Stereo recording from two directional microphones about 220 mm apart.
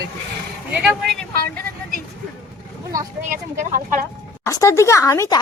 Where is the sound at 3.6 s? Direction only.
35° right (ahead or behind).